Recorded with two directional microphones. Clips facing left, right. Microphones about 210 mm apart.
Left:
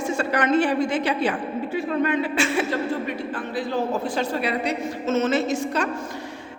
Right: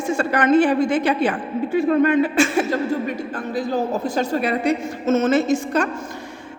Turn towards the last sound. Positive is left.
turn(degrees=-45)  # may be behind; listen again after turning